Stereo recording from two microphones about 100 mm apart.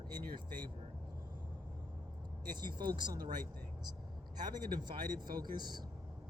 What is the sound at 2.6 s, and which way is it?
Speech, 50° right (ahead or behind).